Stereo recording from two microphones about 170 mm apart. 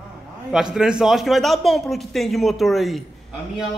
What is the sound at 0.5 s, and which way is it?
Speech, 5° right (ahead or behind).